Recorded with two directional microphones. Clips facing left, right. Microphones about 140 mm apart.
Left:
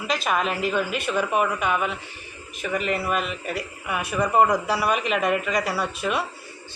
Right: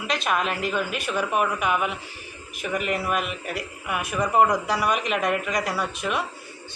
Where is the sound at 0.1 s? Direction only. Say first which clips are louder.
Left 1 dB; centre (ahead or behind).